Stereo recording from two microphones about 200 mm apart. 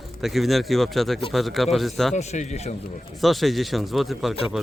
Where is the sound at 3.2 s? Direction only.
Centre (ahead or behind).